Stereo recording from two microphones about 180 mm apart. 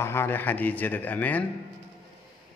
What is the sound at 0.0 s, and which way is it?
A man's voice, 15° left (ahead or behind).